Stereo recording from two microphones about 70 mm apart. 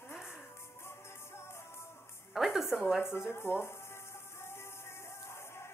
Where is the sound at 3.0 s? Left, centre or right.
Left.